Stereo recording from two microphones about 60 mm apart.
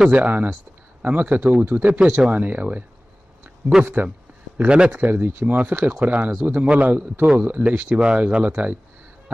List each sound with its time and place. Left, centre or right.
0.1 s a man's voice: right
1.9 s speech: centre
2.3 s a man's voice: right
3.8 s speech: right
4.6 s a man's voice: centre